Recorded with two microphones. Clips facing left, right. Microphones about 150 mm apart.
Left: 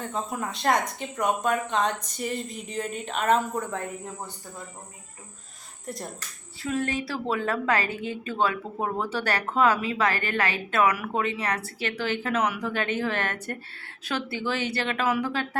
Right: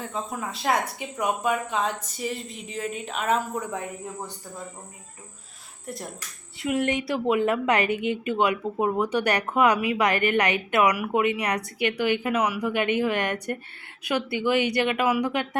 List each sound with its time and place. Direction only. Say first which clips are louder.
0.0 s speech: left 1 dB; centre (ahead or behind)
5.8 s speech: even; centre (ahead or behind)
6.1 s speech: even; 20° right (ahead or behind)